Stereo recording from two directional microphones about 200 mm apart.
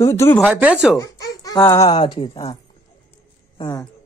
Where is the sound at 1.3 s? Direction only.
20° left (ahead or behind).